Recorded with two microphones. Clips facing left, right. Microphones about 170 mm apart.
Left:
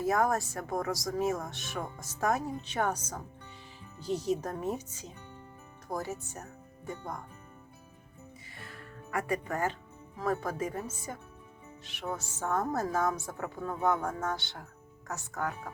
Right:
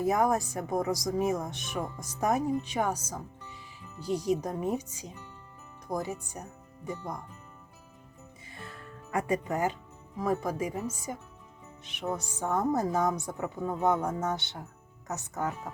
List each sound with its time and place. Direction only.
0.0 s speech: 20° right (ahead or behind)
8.5 s music: 25° right (ahead or behind)
10.2 s a woman's voice: 15° right (ahead or behind)